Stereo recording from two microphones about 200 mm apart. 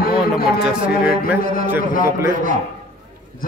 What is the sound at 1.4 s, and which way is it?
Speech, 45° left (ahead or behind).